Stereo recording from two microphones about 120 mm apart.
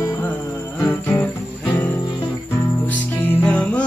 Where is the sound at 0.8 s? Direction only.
20° left (ahead or behind).